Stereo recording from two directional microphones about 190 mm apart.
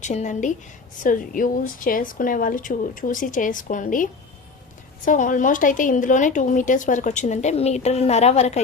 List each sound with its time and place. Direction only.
0.0 s a woman's voice: 40° left (ahead or behind)